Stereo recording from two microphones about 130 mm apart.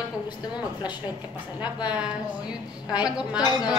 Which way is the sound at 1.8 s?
10° right (ahead or behind).